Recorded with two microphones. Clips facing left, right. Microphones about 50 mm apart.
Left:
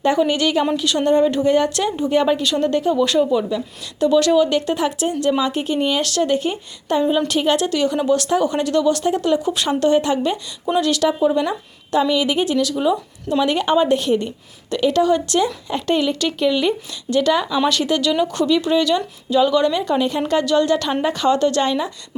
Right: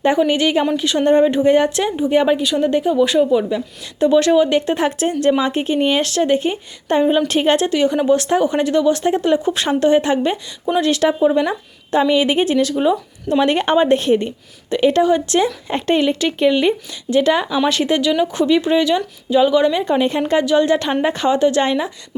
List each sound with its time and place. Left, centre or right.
0.0 s a woman's voice: right
4.0 s a woman's voice: right
7.7 s a woman's voice: right
13.4 s a woman's voice: right